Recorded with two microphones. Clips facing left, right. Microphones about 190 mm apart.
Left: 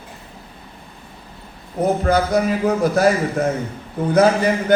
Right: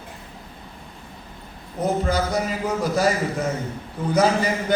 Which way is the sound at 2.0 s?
60° left (ahead or behind).